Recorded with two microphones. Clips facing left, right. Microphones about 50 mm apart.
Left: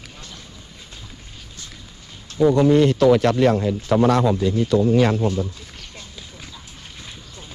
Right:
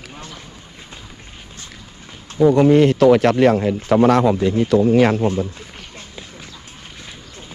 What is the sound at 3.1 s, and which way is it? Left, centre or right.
Speech, right.